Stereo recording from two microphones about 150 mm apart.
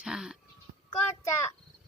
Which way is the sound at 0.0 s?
5° right (ahead or behind).